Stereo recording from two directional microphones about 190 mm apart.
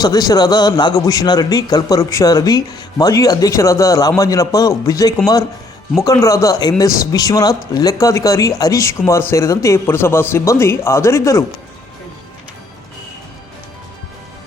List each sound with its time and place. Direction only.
0.0 s a man's voice: 20° left (ahead or behind)